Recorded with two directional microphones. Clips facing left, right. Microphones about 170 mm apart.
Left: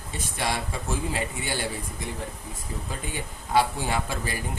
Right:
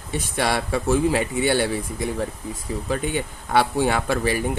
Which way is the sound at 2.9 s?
70° right (ahead or behind).